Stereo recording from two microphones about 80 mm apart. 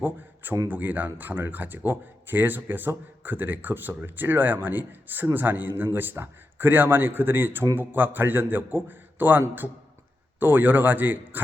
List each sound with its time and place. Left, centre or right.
0.0 s a sound: right
0.7 s speech: right
10.4 s speech: right